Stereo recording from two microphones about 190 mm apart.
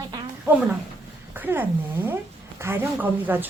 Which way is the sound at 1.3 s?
10° right (ahead or behind).